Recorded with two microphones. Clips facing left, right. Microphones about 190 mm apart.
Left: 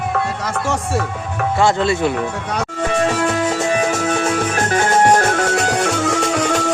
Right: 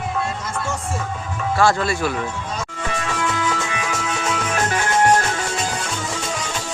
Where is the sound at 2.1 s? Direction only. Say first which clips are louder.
Left 5 dB; 65° left (ahead or behind).